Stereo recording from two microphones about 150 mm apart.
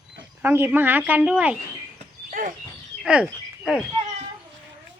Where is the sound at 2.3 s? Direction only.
65° right (ahead or behind).